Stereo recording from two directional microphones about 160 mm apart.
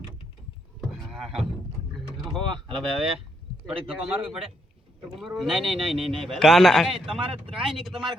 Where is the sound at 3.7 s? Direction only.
Centre (ahead or behind).